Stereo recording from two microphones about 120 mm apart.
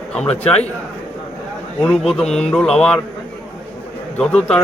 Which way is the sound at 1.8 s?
5° left (ahead or behind).